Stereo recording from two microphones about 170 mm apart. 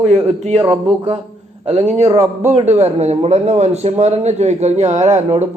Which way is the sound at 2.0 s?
15° right (ahead or behind).